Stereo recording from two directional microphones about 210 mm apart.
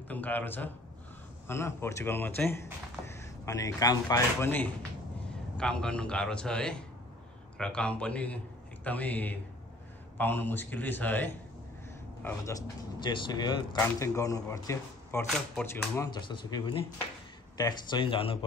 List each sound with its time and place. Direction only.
0.1 s a man's voice: 10° left (ahead or behind)
13.0 s speech: 20° left (ahead or behind)
15.2 s speech: centre (ahead or behind); by 18.4 s 25° left (ahead or behind)